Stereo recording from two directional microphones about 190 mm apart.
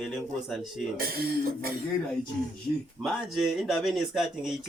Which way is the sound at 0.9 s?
50° right (ahead or behind).